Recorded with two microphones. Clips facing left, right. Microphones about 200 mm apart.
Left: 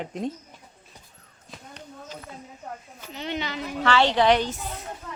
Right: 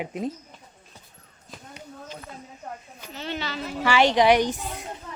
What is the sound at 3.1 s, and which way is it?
Speech, 15° left (ahead or behind).